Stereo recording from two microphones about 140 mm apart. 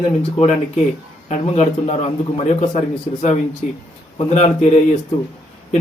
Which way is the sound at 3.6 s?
55° left (ahead or behind).